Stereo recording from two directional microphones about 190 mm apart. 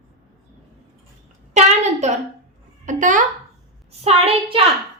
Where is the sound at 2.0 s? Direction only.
35° right (ahead or behind).